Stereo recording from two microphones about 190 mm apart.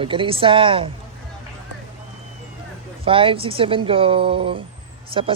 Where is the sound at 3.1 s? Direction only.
30° right (ahead or behind).